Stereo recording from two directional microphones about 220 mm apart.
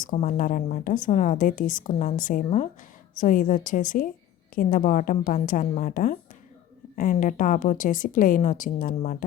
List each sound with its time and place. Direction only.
0.0 s a woman's voice: 35° left (ahead or behind)